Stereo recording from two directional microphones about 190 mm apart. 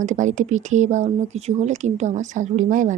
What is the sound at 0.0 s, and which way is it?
Speech, 40° right (ahead or behind).